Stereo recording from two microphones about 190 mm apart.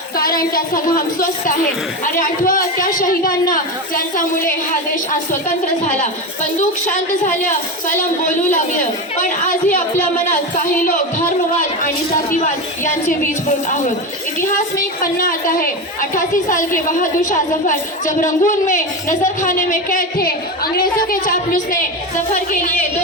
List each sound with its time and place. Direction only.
0.2 s a woman's voice: 50° left (ahead or behind)
12.3 s a woman's voice: 40° left (ahead or behind)
15.0 s a woman's voice: 45° left (ahead or behind)